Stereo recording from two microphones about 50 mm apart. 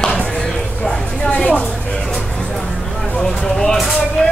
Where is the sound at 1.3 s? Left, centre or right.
Left.